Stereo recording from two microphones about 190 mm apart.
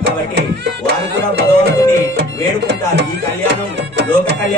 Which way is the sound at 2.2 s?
65° right (ahead or behind).